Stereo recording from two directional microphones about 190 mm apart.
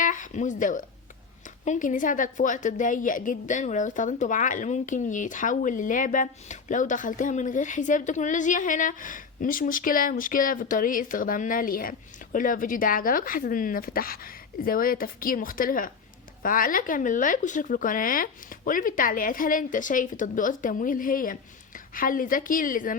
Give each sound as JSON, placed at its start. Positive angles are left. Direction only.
{"t": 0.0, "sound": "a woman's voice", "side_deg": 45}